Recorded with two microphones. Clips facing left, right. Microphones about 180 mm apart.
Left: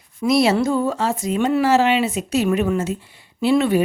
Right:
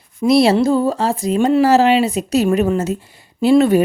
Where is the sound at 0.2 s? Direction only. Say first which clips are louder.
Right 4 dB; 30° right (ahead or behind).